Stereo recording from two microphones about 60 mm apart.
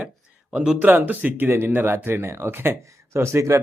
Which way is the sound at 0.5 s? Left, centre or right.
Centre.